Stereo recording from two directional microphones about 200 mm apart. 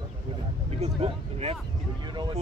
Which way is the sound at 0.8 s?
30° right (ahead or behind).